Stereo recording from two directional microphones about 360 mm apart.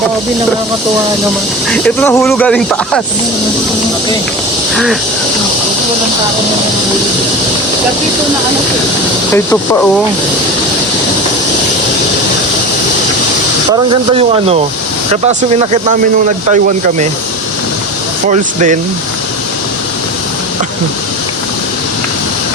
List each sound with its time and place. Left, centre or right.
1.7 s speech: centre
13.9 s speech: centre
18.3 s speech: centre